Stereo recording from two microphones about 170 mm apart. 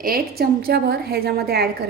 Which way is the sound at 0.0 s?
60° right (ahead or behind).